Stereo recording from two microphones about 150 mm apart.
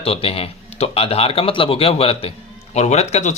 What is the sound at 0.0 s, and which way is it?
Speech, 40° left (ahead or behind).